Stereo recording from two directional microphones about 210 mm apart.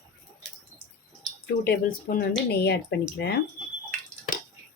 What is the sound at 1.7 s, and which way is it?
A woman's voice, 45° left (ahead or behind).